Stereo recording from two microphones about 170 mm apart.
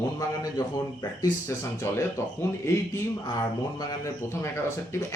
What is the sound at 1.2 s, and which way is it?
Speech, 15° left (ahead or behind).